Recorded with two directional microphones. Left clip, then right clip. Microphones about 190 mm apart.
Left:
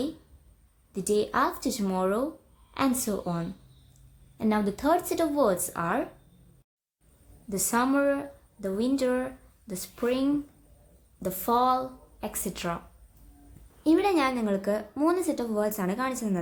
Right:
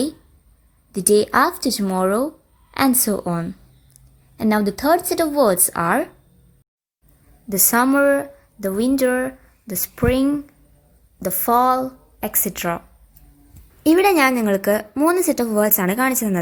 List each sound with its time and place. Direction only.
0.9 s speech: 45° right (ahead or behind)
7.5 s speech: 40° right (ahead or behind)
13.8 s a woman's voice: 45° right (ahead or behind)